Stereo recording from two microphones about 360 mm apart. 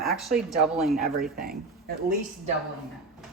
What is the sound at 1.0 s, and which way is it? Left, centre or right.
Speech, right.